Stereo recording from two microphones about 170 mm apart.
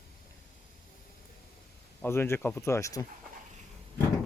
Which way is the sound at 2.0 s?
15° left (ahead or behind).